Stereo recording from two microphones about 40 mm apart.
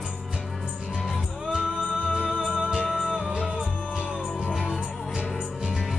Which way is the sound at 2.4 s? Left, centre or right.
Centre.